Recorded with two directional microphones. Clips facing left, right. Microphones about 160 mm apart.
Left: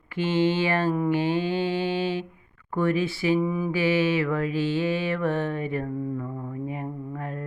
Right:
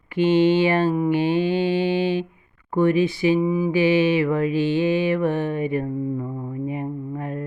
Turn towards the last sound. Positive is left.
turn(degrees=-20)  # may be behind; listen again after turning